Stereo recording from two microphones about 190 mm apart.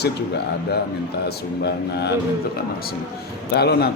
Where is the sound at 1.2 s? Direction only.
60° left (ahead or behind).